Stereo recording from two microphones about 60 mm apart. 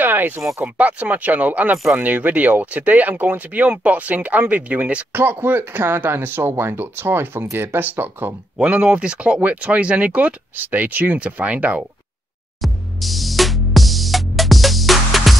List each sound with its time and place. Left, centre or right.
0.0 s a sound: right
0.6 s speech: right
5.1 s speech: right
8.5 s speech: centre
12.6 s music: centre